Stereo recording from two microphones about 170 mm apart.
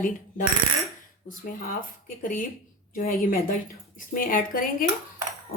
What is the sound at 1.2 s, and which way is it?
Speech, 55° left (ahead or behind).